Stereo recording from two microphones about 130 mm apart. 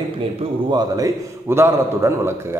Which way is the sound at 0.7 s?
30° right (ahead or behind).